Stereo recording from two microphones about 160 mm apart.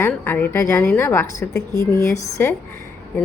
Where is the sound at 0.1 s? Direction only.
10° left (ahead or behind).